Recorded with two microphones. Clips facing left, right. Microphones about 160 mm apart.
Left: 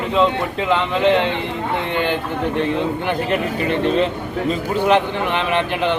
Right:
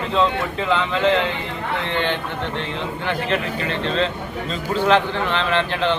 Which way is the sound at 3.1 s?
15° left (ahead or behind).